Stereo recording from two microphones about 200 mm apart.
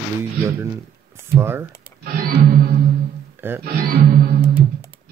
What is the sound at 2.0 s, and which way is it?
Music, 45° right (ahead or behind).